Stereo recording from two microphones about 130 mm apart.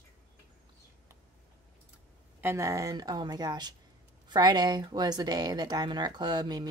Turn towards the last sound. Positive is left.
turn(degrees=-35)  # may be behind; listen again after turning